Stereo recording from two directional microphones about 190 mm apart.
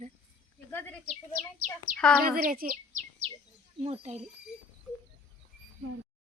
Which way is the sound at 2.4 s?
50° right (ahead or behind).